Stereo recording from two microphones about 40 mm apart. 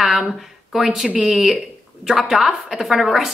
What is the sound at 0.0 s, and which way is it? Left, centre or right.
A woman's voice, centre.